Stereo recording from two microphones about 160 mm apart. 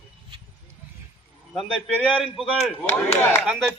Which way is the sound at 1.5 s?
Centre (ahead or behind).